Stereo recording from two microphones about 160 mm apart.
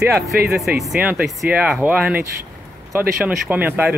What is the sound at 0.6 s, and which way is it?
Speech, 5° right (ahead or behind).